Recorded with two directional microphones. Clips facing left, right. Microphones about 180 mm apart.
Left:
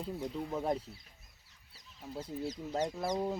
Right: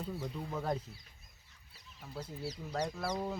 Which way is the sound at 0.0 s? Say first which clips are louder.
Left 2 dB; 20° left (ahead or behind).